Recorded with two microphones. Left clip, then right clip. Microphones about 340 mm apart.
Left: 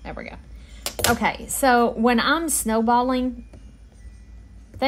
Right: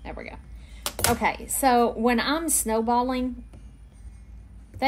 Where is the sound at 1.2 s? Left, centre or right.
Left.